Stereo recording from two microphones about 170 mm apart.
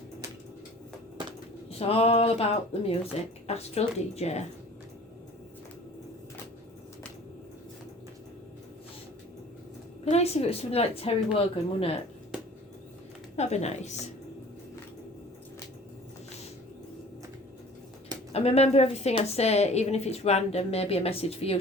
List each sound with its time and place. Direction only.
1.8 s a woman's voice: 35° left (ahead or behind)
10.0 s a woman's voice: 40° left (ahead or behind)
13.3 s a woman's voice: 40° left (ahead or behind)
18.3 s a woman's voice: 35° left (ahead or behind)